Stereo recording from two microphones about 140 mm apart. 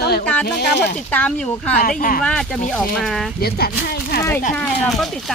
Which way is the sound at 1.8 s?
90° left.